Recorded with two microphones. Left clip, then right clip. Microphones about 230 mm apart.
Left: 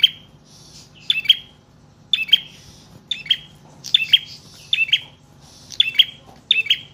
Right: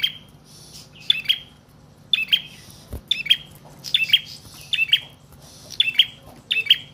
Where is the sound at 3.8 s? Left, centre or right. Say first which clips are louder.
Left 3 dB; centre.